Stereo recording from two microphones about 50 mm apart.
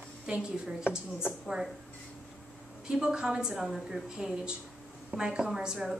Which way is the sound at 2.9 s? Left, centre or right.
Centre.